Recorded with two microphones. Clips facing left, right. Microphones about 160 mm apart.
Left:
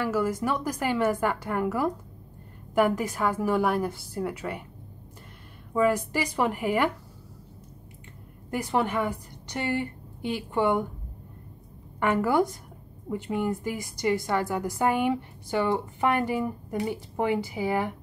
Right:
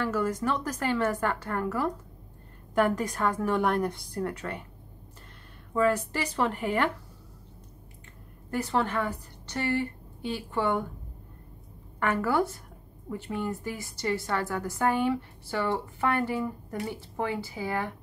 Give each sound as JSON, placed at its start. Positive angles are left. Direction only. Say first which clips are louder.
{"t": 0.0, "sound": "a woman's voice", "louder": "left 2 dB", "side_deg": 10}
{"t": 5.7, "sound": "a woman's voice", "louder": "left 2 dB", "side_deg": 10}
{"t": 8.5, "sound": "a woman's voice", "louder": "left 1 dB", "side_deg": 15}
{"t": 12.0, "sound": "a woman's voice", "louder": "left 3 dB", "side_deg": 15}